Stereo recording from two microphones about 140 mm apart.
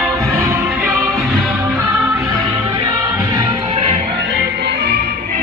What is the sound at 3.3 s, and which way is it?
Music, 35° right (ahead or behind).